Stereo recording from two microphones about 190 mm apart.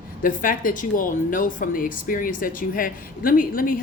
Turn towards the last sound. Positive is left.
turn(degrees=45)  # may be behind; listen again after turning